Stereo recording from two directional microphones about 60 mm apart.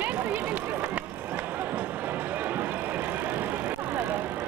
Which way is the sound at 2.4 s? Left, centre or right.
Right.